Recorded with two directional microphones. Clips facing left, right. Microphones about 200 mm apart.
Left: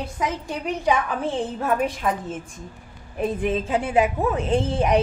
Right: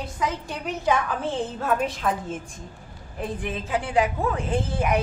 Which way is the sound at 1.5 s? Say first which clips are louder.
Left 2 dB; 10° left (ahead or behind).